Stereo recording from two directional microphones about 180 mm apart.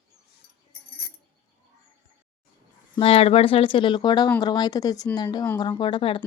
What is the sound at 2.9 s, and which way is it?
A woman's voice, 30° left (ahead or behind).